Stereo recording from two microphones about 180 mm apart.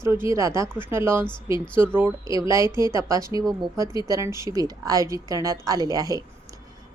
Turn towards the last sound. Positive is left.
turn(degrees=-20)  # may be behind; listen again after turning